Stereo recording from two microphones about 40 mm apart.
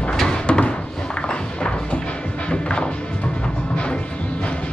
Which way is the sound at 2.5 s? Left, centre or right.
Left.